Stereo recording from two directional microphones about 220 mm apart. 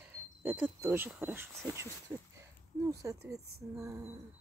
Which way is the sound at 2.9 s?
15° right (ahead or behind).